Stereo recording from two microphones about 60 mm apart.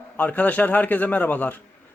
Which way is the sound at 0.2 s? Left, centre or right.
Left.